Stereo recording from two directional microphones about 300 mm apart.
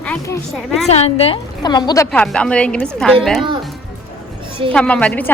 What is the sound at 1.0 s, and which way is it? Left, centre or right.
A woman's voice, centre.